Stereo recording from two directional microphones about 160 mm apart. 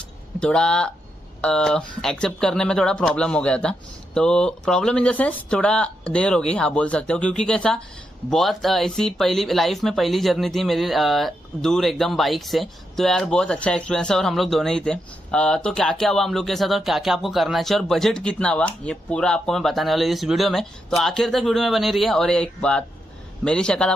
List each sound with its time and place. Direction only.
0.4 s speech: 5° left (ahead or behind)